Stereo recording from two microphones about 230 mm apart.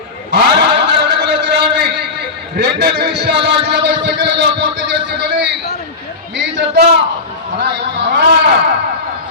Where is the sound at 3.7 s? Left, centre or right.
Right.